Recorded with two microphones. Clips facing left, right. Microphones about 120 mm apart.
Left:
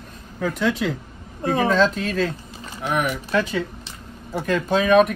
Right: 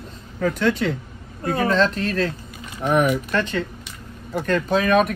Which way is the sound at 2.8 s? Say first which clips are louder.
Right 5 dB; 35° right (ahead or behind).